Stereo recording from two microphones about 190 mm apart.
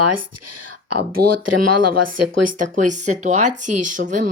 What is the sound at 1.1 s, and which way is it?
Speech, 50° right (ahead or behind).